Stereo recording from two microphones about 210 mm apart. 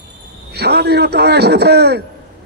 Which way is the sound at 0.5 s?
50° right (ahead or behind).